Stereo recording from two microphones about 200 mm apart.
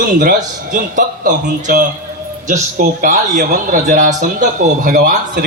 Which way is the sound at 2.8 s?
40° right (ahead or behind).